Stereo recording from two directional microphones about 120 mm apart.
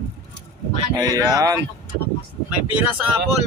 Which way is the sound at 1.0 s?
30° right (ahead or behind).